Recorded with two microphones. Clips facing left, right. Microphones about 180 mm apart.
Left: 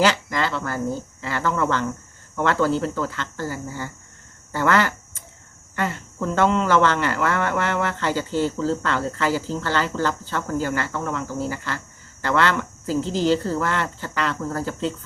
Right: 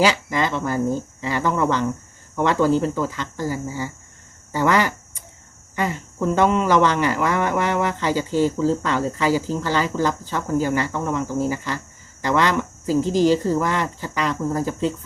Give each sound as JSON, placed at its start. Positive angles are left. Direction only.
{"t": 0.0, "sound": "speech", "side_deg": -10}